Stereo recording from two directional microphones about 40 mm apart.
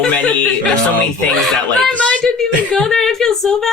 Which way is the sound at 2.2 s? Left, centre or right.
Centre.